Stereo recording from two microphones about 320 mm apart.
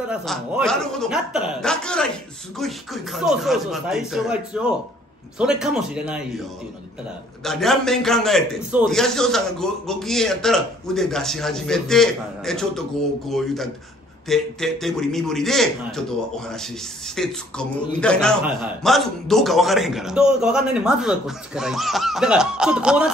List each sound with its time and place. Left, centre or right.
0.1 s a man's voice: centre
7.4 s a man's voice: centre
14.2 s a man's voice: centre